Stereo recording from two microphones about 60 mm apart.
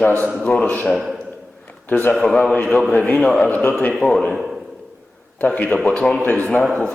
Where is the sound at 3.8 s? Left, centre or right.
Left.